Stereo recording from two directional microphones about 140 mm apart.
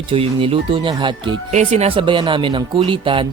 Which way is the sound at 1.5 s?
55° right (ahead or behind).